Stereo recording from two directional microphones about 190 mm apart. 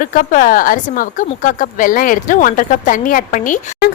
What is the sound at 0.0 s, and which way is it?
Speech, 45° left (ahead or behind).